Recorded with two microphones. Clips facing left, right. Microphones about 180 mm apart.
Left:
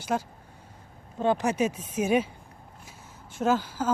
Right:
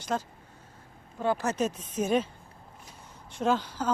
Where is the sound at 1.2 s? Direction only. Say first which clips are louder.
Left 3 dB; 20° left (ahead or behind).